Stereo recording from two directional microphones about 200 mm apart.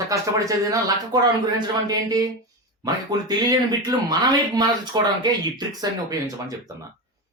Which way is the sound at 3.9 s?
20° right (ahead or behind).